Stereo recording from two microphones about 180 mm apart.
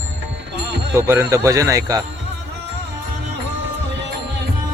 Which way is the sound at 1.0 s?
15° right (ahead or behind).